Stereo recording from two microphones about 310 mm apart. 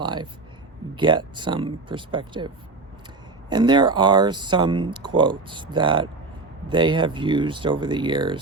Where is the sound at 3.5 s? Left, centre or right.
Centre.